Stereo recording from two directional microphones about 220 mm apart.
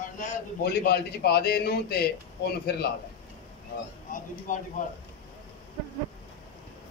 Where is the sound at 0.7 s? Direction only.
45° left (ahead or behind).